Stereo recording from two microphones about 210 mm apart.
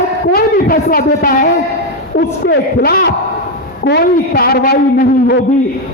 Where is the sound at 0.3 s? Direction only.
45° left (ahead or behind).